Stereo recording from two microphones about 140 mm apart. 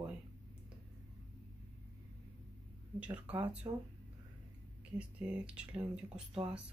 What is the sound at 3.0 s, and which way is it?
Speech, 10° right (ahead or behind).